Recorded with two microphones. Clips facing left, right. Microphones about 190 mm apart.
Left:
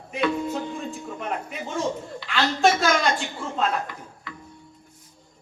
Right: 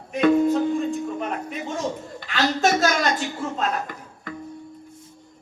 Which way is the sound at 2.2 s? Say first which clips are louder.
Even; 45° right (ahead or behind).